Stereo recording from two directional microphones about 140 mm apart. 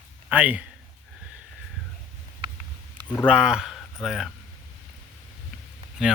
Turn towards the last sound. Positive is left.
turn(degrees=-5)  # may be behind; listen again after turning